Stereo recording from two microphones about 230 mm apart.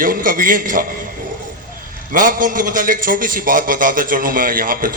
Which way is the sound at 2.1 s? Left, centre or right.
Right.